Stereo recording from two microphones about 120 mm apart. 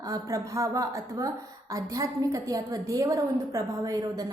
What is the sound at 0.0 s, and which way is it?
A woman's voice, 30° right (ahead or behind).